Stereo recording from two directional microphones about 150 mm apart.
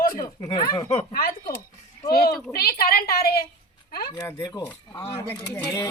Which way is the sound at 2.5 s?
90° left.